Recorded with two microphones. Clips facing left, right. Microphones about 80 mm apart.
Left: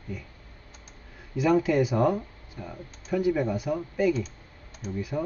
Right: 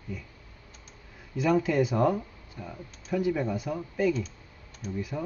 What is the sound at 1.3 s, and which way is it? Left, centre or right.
Speech, centre.